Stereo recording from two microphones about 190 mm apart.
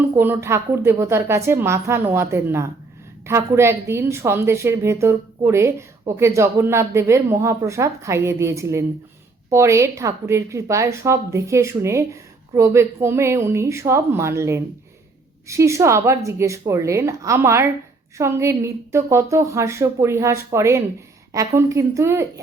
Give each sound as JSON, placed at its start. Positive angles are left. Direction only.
{"t": 0.2, "sound": "a woman's voice", "side_deg": -15}